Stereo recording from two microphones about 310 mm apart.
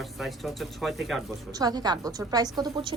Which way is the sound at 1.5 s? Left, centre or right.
Centre.